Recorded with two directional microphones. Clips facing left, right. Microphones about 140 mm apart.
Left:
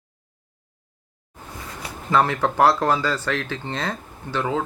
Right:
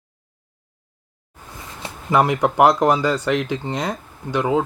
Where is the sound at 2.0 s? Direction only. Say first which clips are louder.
Right 3 dB; 15° right (ahead or behind).